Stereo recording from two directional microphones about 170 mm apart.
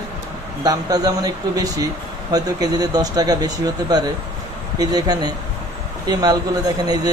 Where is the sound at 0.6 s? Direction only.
20° right (ahead or behind).